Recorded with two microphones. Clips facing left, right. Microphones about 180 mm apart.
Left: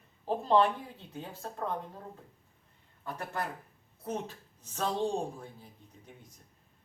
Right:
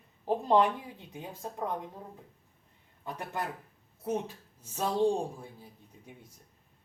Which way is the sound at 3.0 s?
15° right (ahead or behind).